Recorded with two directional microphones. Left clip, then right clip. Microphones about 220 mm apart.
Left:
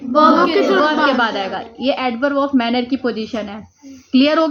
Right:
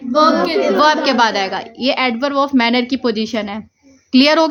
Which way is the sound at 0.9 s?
55° right (ahead or behind).